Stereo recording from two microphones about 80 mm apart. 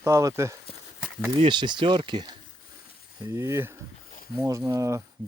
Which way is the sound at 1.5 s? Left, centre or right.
Right.